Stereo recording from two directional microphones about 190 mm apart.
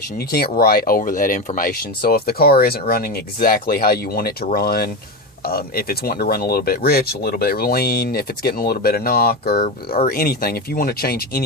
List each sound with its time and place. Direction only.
0.3 s speech: 55° left (ahead or behind)